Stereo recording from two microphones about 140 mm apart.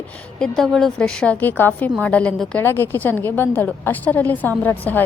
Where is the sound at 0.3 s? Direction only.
5° left (ahead or behind).